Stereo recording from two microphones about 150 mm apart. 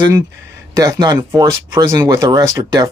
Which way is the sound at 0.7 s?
25° right (ahead or behind).